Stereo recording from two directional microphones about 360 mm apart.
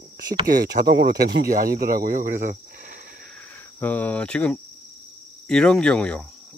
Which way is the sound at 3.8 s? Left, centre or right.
Centre.